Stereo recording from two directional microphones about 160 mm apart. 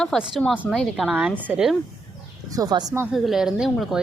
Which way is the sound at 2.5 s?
25° right (ahead or behind).